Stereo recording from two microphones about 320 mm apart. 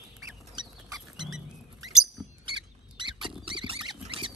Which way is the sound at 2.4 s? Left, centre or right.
Centre.